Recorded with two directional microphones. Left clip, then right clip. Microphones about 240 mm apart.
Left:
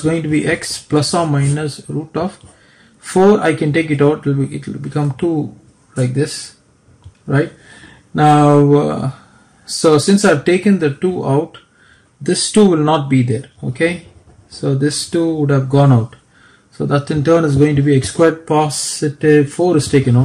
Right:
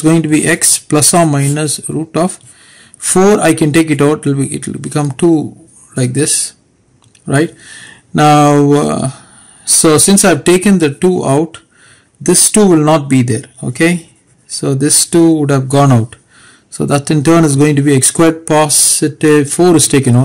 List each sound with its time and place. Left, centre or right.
0.0 s speech: right
3.1 s speech: right
8.1 s speech: right